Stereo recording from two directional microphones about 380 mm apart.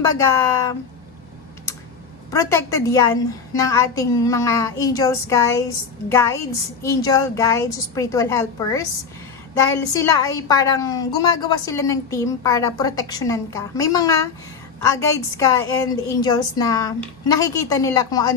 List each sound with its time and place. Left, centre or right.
0.2 s a woman's voice: centre
2.3 s a woman's voice: centre
9.9 s a woman's voice: centre